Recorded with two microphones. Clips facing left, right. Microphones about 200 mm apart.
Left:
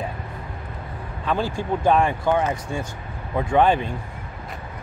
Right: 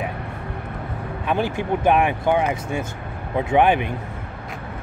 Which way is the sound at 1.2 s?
20° right (ahead or behind).